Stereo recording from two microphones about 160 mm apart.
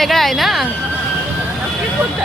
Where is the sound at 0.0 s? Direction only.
Centre (ahead or behind).